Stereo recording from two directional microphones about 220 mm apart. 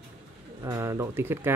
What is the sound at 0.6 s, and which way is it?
Speech, 15° right (ahead or behind).